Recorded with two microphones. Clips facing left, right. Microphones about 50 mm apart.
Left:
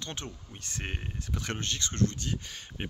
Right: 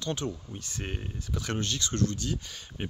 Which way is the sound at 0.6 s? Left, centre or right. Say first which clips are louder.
Right 1 dB; left.